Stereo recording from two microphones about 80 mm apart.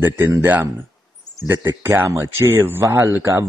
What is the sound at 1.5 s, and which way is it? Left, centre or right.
Speech, right.